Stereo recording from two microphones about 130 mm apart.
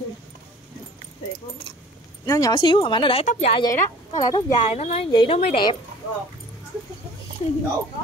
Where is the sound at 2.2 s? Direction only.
30° left (ahead or behind).